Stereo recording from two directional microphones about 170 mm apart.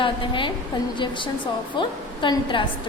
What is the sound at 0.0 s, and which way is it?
A woman's voice, 30° left (ahead or behind).